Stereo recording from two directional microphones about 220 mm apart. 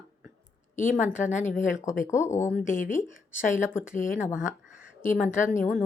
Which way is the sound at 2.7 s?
35° left (ahead or behind).